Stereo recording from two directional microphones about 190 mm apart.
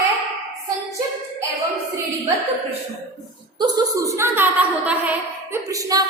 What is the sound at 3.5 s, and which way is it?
A woman's voice, 20° right (ahead or behind).